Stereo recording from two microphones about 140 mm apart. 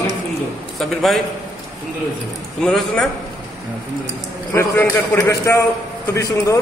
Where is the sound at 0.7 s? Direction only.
Centre (ahead or behind).